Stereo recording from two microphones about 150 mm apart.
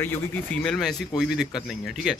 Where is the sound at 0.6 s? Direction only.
Centre (ahead or behind).